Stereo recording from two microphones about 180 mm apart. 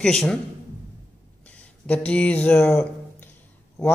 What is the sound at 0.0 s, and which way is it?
Speech, centre (ahead or behind).